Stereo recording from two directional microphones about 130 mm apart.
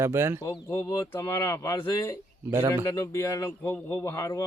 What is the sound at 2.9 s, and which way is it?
Speech, 20° left (ahead or behind).